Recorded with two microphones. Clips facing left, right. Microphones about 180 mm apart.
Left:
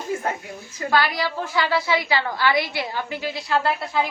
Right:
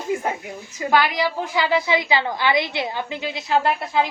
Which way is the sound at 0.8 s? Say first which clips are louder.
Right 2 dB; 20° right (ahead or behind).